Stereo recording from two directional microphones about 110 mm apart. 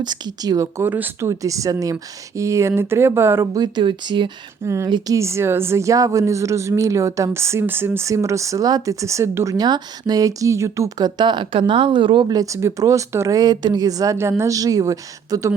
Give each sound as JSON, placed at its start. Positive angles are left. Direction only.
{"t": 0.0, "sound": "speech", "side_deg": -40}
{"t": 0.8, "sound": "speech", "side_deg": -20}
{"t": 1.3, "sound": "speech", "side_deg": -30}
{"t": 4.6, "sound": "speech", "side_deg": -25}
{"t": 4.9, "sound": "speech", "side_deg": -40}
{"t": 5.1, "sound": "speech", "side_deg": -25}
{"t": 12.3, "sound": "speech", "side_deg": -30}